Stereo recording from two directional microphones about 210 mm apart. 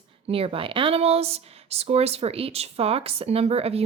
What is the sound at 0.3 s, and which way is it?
Speech, 25° right (ahead or behind).